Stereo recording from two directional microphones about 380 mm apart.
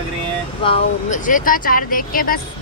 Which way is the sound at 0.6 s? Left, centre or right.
Centre.